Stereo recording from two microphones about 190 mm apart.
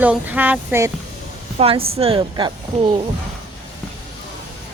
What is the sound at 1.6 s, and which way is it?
Speech, 30° right (ahead or behind).